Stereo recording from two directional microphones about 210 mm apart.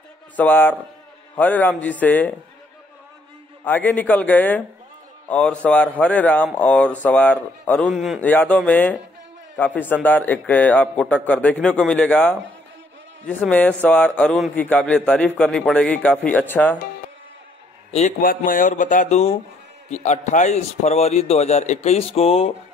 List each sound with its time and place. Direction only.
0.4 s a man's voice: 10° left (ahead or behind)
3.6 s a man's voice: 10° left (ahead or behind)
17.9 s speech: 40° left (ahead or behind)